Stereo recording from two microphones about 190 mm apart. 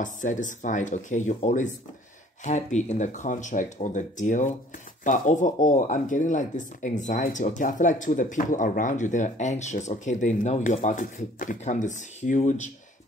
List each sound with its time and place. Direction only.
0.0 s speech: 40° left (ahead or behind)